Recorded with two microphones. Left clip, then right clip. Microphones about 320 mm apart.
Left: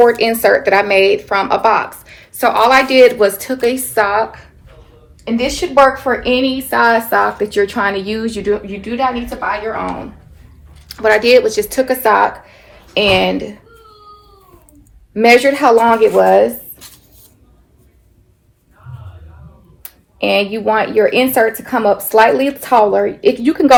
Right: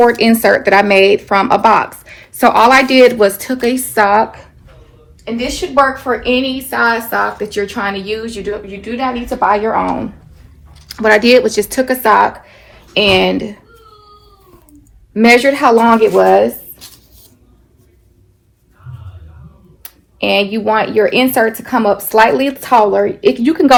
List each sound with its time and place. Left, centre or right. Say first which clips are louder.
0.2 s speech: right 1 dB; right
5.2 s a woman's voice: left 2 dB; left
9.5 s speech: right 6 dB; centre
15.1 s speech: even; right
19.8 s speech: even; right